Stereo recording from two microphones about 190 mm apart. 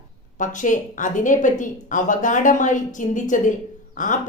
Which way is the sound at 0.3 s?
40° left (ahead or behind).